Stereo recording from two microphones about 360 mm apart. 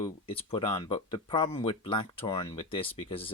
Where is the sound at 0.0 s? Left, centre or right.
Centre.